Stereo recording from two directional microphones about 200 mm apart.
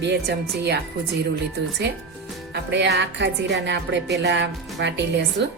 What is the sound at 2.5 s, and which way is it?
Speech, 60° right (ahead or behind).